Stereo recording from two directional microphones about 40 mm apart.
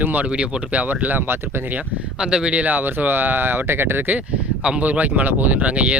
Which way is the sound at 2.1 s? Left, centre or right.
Right.